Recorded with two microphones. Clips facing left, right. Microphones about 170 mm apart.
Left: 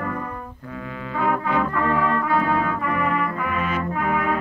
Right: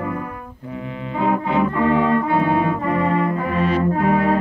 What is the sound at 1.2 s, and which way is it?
Brass instrument, 25° right (ahead or behind).